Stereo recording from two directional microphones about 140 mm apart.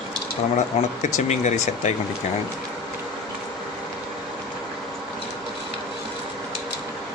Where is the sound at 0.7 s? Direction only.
50° left (ahead or behind).